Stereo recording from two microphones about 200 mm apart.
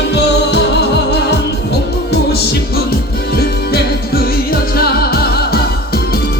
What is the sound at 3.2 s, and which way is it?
Music, 50° left (ahead or behind).